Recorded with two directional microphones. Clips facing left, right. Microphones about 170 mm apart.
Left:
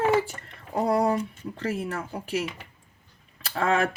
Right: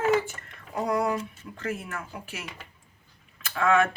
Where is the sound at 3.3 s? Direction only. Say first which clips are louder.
Right 1 dB; 35° left (ahead or behind).